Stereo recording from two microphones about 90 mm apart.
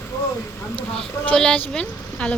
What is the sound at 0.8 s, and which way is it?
A woman's voice, 10° left (ahead or behind).